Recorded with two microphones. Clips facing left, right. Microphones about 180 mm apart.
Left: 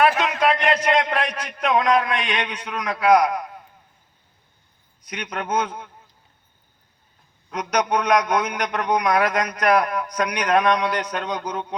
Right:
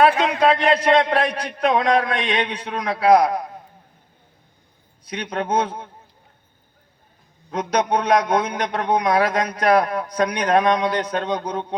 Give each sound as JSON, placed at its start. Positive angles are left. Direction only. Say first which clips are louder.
{"t": 0.2, "sound": "a man's voice", "louder": "right 3 dB", "side_deg": -35}
{"t": 5.0, "sound": "a man's voice", "louder": "right 4 dB", "side_deg": -30}
{"t": 7.5, "sound": "a man's voice", "louder": "right 2 dB", "side_deg": -30}